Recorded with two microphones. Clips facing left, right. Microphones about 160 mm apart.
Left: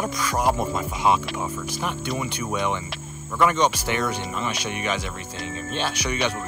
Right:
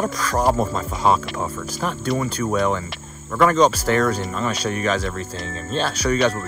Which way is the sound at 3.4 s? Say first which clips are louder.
Right 5 dB; 30° right (ahead or behind).